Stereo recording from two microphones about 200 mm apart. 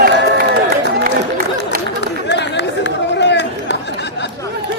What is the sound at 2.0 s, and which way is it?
Chatter, 60° left (ahead or behind).